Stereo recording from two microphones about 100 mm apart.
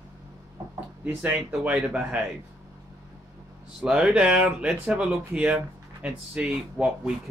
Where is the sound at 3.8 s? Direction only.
10° right (ahead or behind).